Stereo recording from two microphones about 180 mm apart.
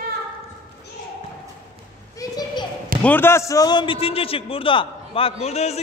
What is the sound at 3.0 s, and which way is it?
A man's voice, 10° left (ahead or behind).